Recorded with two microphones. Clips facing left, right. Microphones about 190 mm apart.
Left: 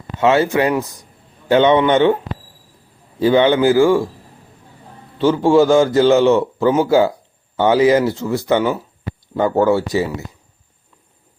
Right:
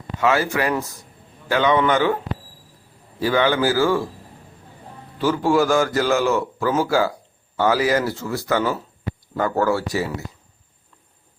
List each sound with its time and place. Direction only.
0.2 s a man's voice: 25° left (ahead or behind)
3.2 s a man's voice: 20° left (ahead or behind)
5.1 s a man's voice: 25° left (ahead or behind)